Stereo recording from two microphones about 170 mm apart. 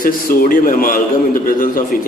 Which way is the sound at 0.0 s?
55° left (ahead or behind).